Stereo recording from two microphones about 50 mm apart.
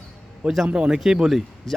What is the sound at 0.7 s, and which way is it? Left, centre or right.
Speech, centre.